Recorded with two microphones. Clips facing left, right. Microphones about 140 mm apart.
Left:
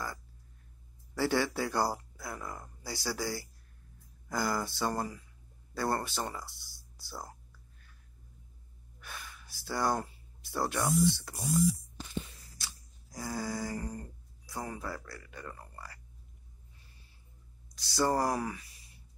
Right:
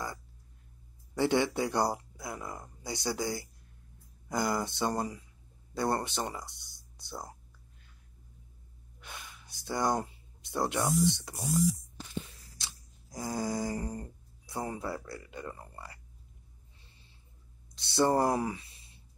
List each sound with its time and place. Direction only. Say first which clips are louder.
1.1 s speech: right 2 dB; 20° right (ahead or behind)
9.0 s speech: even; 20° right (ahead or behind)
12.5 s a sound: even; 20° right (ahead or behind)
17.7 s speech: right 3 dB; 25° right (ahead or behind)